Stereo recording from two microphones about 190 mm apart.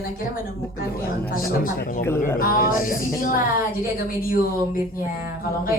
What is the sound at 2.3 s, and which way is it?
Speech, 50° left (ahead or behind).